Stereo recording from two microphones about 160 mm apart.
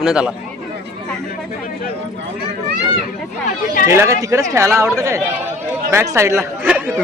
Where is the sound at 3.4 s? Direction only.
55° left (ahead or behind).